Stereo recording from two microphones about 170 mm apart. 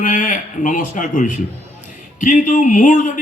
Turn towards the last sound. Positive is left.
turn(degrees=50)  # may be behind; listen again after turning